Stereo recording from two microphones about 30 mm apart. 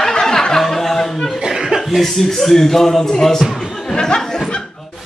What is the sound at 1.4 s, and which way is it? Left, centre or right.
Chuckle, centre.